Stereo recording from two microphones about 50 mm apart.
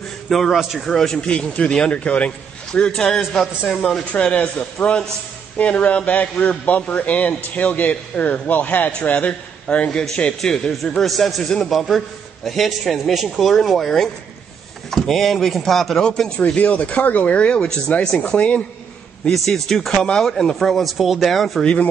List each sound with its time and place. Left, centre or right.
0.3 s speech: centre
0.8 s a man's voice: centre
3.7 s speech: centre
4.1 s a man's voice: left
9.8 s speech: centre
10.7 s speech: centre
16.0 s speech: centre
16.3 s a man's voice: left
19.5 s speech: centre